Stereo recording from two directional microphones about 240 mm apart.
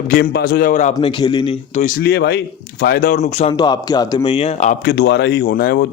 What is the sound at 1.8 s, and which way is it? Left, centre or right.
A man's voice, left.